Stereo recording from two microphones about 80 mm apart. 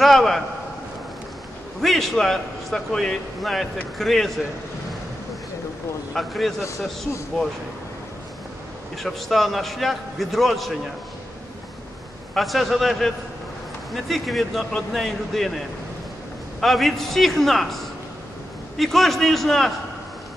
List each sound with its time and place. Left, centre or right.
0.0 s a man's voice: centre
1.8 s a man's voice: centre
6.1 s a man's voice: centre
8.9 s a man's voice: centre
12.4 s a man's voice: centre
16.6 s a man's voice: centre